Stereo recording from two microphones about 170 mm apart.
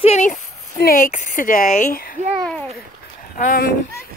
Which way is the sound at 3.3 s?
55° left (ahead or behind).